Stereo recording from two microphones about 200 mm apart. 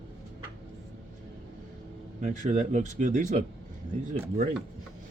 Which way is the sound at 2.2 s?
40° right (ahead or behind).